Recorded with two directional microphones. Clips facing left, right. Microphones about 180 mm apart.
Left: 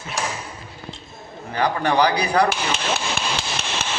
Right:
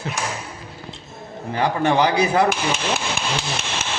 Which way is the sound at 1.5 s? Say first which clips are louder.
Right 1 dB; 25° right (ahead or behind).